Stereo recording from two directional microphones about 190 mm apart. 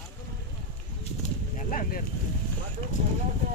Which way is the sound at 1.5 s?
45° left (ahead or behind).